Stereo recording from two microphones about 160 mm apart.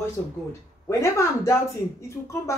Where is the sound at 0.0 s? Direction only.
15° left (ahead or behind).